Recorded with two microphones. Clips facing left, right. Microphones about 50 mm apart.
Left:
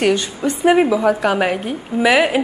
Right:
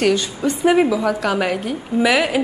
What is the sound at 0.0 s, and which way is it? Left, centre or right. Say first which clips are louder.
A woman's voice: left 1 dB; centre.